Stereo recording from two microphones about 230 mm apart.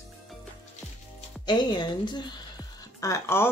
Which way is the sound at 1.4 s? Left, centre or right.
Centre.